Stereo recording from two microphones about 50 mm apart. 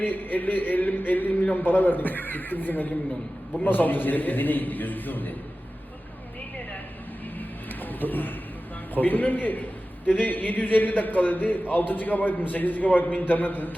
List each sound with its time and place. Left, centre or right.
0.0 s speech: left
7.3 s a sound: left
9.0 s speech: left